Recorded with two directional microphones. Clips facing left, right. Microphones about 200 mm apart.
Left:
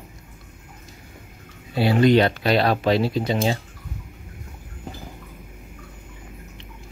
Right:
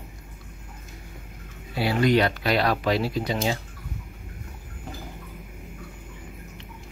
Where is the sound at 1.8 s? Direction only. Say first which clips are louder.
Left 5 dB; 25° left (ahead or behind).